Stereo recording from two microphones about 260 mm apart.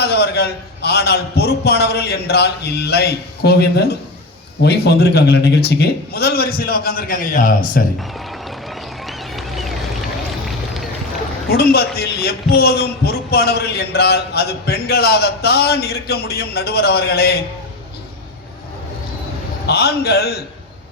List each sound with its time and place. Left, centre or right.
0.0 s a man's voice: left
9.0 s run: centre
11.5 s a man's voice: left
19.6 s a man's voice: left